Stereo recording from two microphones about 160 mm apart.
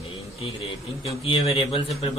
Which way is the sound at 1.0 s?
35° left (ahead or behind).